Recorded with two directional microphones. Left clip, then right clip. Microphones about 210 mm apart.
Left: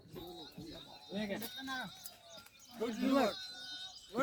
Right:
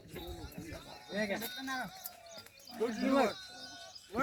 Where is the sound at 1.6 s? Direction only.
10° left (ahead or behind).